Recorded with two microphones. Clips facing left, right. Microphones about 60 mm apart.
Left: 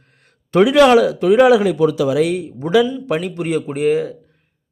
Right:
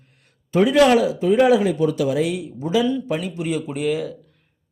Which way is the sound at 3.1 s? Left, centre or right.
Left.